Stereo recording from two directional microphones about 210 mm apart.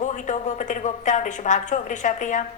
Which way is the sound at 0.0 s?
35° left (ahead or behind).